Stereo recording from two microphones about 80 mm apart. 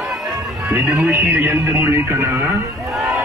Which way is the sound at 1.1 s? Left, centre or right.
Right.